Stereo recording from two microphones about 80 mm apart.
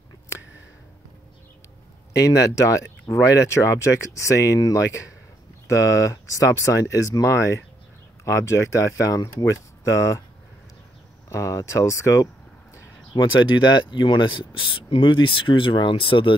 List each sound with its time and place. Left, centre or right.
2.2 s speech: left
11.2 s speech: left
13.1 s speech: left